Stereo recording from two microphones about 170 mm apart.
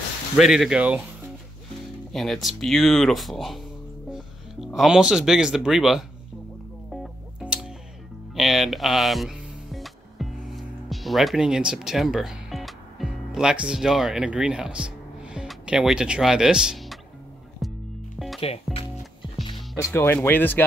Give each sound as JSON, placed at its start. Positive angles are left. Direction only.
{"t": 0.4, "sound": "speech", "side_deg": 0}
{"t": 2.1, "sound": "speech", "side_deg": 0}
{"t": 6.9, "sound": "music", "side_deg": -5}
{"t": 18.4, "sound": "speech", "side_deg": 35}
{"t": 19.7, "sound": "speech", "side_deg": 15}